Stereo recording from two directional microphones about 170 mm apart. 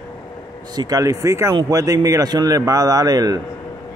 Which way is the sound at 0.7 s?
20° right (ahead or behind).